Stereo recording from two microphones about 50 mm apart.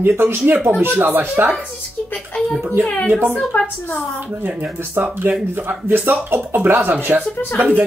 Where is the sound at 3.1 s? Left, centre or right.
Right.